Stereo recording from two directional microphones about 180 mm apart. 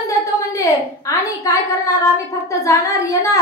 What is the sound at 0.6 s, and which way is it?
A woman's voice, 20° left (ahead or behind).